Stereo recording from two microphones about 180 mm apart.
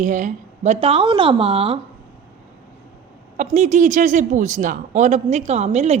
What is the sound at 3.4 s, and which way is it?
Speech, 40° right (ahead or behind).